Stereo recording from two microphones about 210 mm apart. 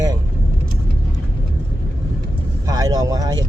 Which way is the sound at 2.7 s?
15° right (ahead or behind).